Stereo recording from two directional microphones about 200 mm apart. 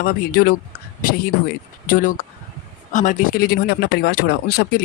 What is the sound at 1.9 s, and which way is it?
Speech, 45° left (ahead or behind).